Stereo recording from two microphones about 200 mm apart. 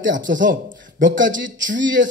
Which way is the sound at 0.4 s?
40° right (ahead or behind).